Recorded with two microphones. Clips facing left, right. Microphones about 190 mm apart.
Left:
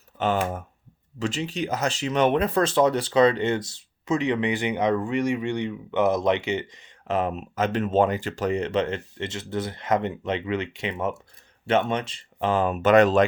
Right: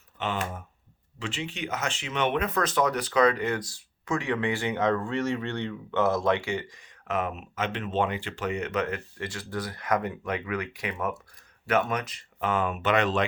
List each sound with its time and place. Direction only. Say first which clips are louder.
0.2 s speech: left 7 dB; 45° left (ahead or behind)